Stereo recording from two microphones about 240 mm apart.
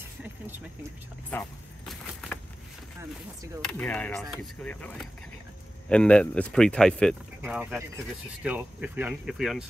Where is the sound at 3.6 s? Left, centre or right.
Centre.